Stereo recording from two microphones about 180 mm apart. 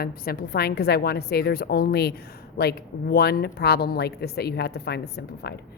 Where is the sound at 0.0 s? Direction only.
60° left (ahead or behind).